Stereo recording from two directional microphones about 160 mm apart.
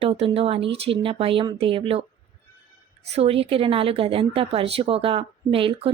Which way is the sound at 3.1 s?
40° right (ahead or behind).